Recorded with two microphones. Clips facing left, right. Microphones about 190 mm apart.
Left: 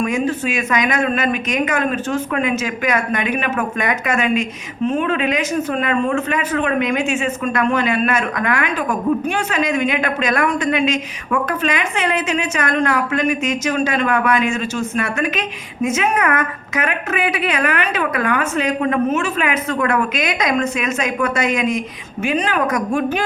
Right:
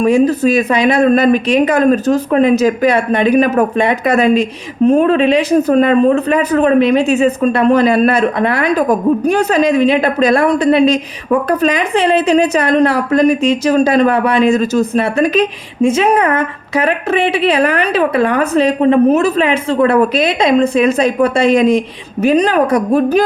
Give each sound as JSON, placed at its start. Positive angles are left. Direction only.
{"t": 0.0, "sound": "speech", "side_deg": -35}